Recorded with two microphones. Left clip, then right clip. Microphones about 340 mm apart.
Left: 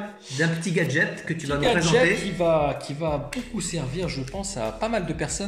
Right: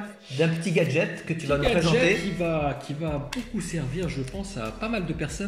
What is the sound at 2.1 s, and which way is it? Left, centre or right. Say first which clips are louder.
Speech: even; centre.